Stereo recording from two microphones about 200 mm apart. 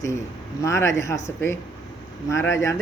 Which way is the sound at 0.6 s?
15° left (ahead or behind).